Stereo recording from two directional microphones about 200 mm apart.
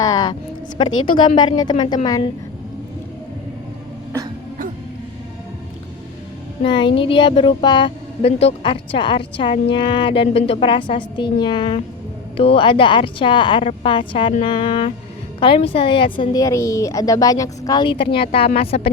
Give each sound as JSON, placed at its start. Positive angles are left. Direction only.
{"t": 0.0, "sound": "a sound", "side_deg": 20}
{"t": 0.8, "sound": "a woman's voice", "side_deg": 25}
{"t": 6.6, "sound": "a woman's voice", "side_deg": 25}